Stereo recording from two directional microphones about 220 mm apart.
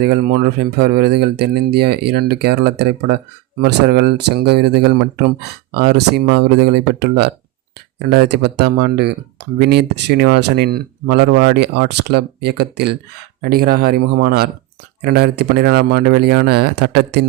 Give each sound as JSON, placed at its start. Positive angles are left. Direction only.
{"t": 0.0, "sound": "speech", "side_deg": -45}